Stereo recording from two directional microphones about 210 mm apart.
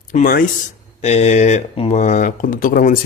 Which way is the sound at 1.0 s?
30° left (ahead or behind).